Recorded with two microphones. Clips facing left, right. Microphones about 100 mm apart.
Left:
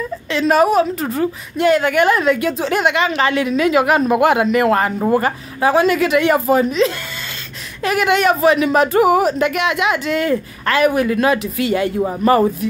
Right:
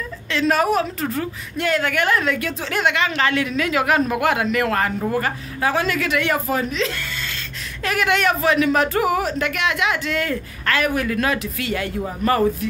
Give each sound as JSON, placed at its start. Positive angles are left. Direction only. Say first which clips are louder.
{"t": 0.3, "sound": "speech", "louder": "left 5 dB", "side_deg": 15}